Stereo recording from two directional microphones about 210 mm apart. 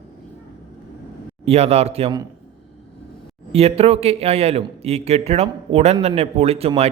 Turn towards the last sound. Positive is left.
turn(degrees=-30)  # may be behind; listen again after turning